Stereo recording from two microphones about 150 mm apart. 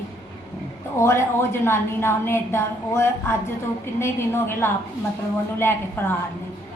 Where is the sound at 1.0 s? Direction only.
15° left (ahead or behind).